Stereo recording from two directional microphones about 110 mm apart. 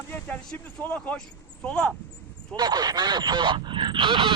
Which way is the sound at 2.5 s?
40° right (ahead or behind).